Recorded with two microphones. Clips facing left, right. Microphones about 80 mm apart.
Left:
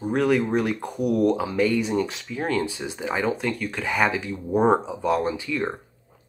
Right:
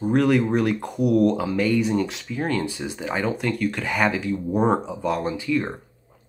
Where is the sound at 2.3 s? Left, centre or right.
Centre.